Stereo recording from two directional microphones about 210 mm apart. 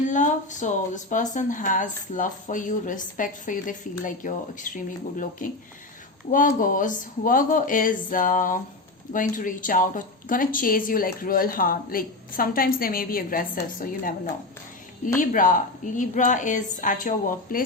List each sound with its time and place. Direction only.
0.1 s speech: 35° left (ahead or behind)
15.2 s speech: 40° left (ahead or behind)